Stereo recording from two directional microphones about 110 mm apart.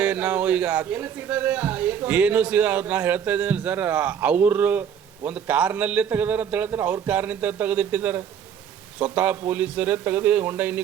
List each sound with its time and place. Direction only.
0.0 s speech: 15° right (ahead or behind)